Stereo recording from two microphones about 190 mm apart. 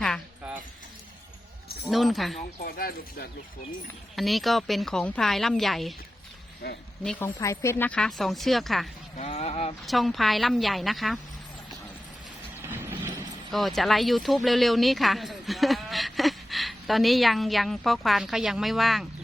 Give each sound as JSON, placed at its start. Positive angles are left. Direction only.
{"t": 0.0, "sound": "a sound", "side_deg": 0}
{"t": 1.9, "sound": "speech", "side_deg": 0}
{"t": 2.6, "sound": "speech", "side_deg": 50}
{"t": 4.1, "sound": "speech", "side_deg": 0}
{"t": 6.6, "sound": "speech", "side_deg": 60}
{"t": 7.0, "sound": "speech", "side_deg": 5}
{"t": 9.1, "sound": "speech", "side_deg": 35}
{"t": 9.8, "sound": "speech", "side_deg": 0}
{"t": 12.6, "sound": "train", "side_deg": -10}
{"t": 13.5, "sound": "speech", "side_deg": 0}